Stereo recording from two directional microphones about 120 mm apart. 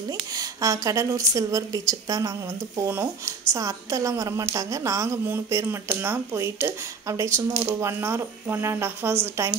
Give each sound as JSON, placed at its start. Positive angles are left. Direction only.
{"t": 0.3, "sound": "a woman's voice", "side_deg": -30}